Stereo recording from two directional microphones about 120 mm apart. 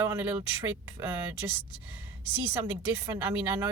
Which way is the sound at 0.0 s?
20° right (ahead or behind).